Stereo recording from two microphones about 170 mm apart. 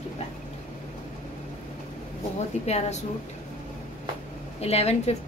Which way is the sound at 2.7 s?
40° left (ahead or behind).